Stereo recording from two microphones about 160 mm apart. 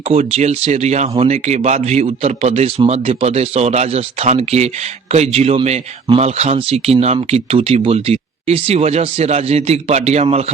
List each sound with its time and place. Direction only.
0.1 s a man's voice: 40° right (ahead or behind)